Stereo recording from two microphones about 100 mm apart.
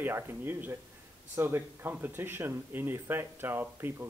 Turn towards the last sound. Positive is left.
turn(degrees=-20)  # may be behind; listen again after turning